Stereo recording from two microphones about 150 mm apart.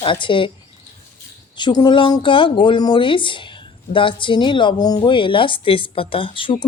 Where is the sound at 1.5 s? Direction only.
30° left (ahead or behind).